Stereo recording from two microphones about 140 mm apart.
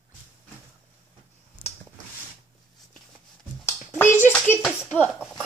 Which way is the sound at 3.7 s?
15° left (ahead or behind).